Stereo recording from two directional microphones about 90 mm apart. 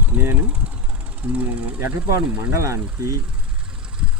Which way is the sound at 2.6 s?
35° right (ahead or behind).